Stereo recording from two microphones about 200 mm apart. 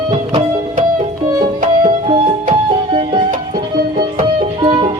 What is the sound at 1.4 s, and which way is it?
Music, 35° right (ahead or behind).